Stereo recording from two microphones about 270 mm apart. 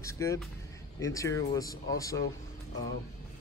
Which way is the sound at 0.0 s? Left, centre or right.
Centre.